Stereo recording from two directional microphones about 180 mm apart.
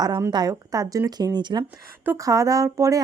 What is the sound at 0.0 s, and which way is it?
A woman's voice, 20° right (ahead or behind).